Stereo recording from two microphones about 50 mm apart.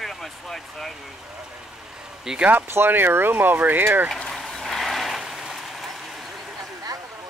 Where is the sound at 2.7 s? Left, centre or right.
Right.